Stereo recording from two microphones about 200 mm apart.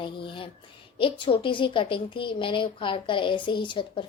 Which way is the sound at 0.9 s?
25° left (ahead or behind).